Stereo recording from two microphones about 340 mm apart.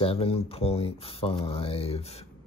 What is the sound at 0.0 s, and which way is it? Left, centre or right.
Speech, centre.